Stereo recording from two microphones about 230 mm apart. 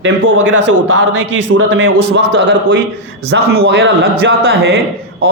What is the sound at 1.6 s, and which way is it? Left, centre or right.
A man's voice, right.